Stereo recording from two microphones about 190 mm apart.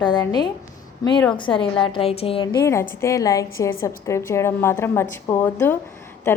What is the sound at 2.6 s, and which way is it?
A woman's voice, 15° left (ahead or behind).